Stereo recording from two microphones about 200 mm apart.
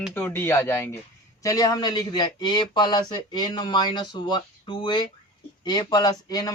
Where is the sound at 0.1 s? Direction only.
10° left (ahead or behind).